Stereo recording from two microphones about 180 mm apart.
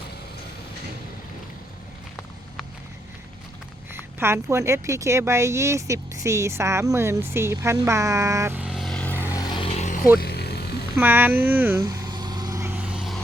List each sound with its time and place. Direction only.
4.2 s speech: 15° right (ahead or behind); by 9.2 s 5° left (ahead or behind)
9.3 s a sound: 20° left (ahead or behind)
10.2 s music: 60° left (ahead or behind)
10.9 s speech: 10° right (ahead or behind)
11.8 s vehicle: 20° right (ahead or behind); by 13.2 s centre (ahead or behind)